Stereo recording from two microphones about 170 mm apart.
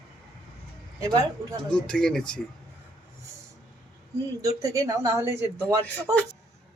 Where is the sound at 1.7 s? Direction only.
5° left (ahead or behind).